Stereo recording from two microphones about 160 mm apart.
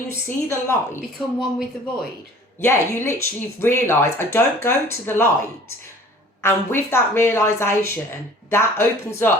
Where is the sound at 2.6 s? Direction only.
15° left (ahead or behind).